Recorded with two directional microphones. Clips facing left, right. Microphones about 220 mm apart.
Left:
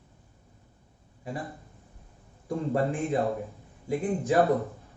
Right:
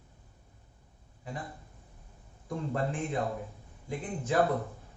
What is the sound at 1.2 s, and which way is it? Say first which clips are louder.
Speech: left 5 dB; 15° left (ahead or behind).